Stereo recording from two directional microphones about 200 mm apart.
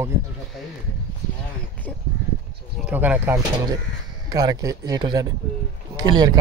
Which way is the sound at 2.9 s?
10° right (ahead or behind).